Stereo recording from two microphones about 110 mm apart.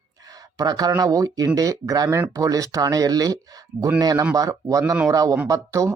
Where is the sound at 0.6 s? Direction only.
35° right (ahead or behind).